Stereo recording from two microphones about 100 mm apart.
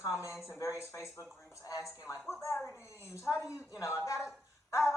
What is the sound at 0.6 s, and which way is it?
Speech, 30° left (ahead or behind).